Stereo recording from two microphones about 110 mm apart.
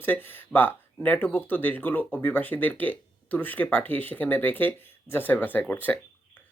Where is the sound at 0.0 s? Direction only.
20° left (ahead or behind).